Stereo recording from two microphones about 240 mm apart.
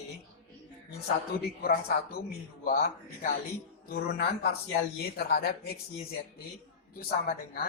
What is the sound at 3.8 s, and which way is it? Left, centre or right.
Speech, left.